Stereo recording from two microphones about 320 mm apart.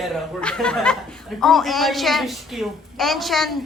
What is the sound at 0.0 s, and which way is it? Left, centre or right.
Speech, centre.